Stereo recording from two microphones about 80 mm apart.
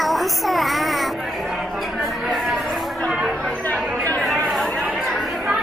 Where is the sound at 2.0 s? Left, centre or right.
Centre.